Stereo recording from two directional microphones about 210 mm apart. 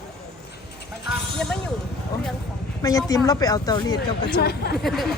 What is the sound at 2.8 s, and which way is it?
Speech, 15° left (ahead or behind).